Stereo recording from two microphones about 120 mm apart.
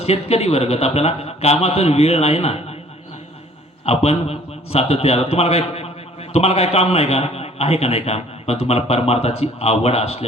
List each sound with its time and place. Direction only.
0.0 s a man's voice: 60° left (ahead or behind)
3.8 s a man's voice: 60° left (ahead or behind)